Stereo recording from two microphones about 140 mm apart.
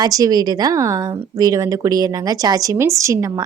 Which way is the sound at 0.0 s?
25° right (ahead or behind).